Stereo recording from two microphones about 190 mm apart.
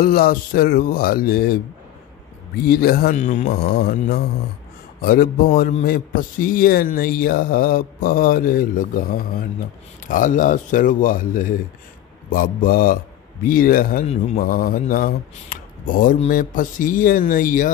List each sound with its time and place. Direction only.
0.0 s speech: 50° left (ahead or behind)
2.7 s speech: 50° left (ahead or behind)
3.5 s speech: 55° left (ahead or behind)
14.0 s a man's voice: 35° left (ahead or behind)
14.4 s speech: 50° left (ahead or behind)